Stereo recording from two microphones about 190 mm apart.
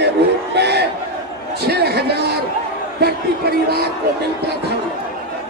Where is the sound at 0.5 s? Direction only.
60° right (ahead or behind).